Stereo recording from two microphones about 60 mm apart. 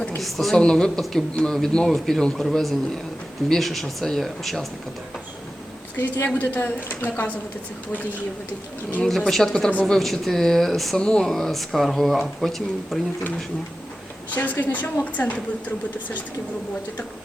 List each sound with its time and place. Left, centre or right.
0.2 s a man's voice: centre
6.0 s a woman's voice: left
9.0 s a man's voice: centre
14.3 s a woman's voice: left